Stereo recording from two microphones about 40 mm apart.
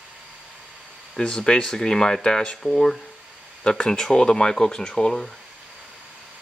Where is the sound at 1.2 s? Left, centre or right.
Left.